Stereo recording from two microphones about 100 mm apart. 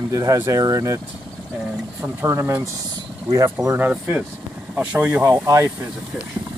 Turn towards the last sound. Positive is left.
turn(degrees=-30)  # may be behind; listen again after turning